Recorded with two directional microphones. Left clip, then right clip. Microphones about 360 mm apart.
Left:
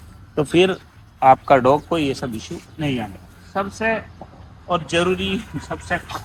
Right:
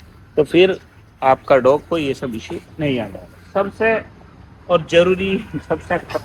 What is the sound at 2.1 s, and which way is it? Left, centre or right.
Speech, centre.